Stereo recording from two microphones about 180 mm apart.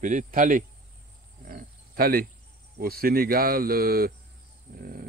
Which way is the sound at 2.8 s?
55° right (ahead or behind).